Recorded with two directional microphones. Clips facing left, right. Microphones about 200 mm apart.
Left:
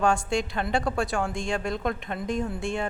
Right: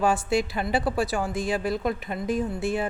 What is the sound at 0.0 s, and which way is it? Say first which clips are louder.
A woman's voice: right 1 dB; 5° right (ahead or behind).